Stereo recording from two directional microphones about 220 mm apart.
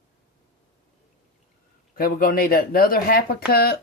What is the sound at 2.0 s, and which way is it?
Speech, 40° left (ahead or behind).